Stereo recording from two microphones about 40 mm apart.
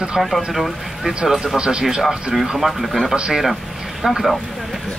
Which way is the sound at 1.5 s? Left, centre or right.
Right.